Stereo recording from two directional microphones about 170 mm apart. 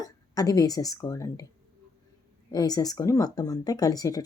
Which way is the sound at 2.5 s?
20° left (ahead or behind).